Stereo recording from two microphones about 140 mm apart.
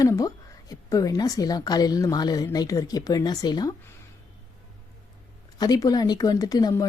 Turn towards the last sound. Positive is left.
turn(degrees=25)  # may be behind; listen again after turning